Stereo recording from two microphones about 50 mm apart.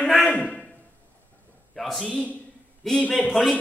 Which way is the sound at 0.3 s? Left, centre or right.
Centre.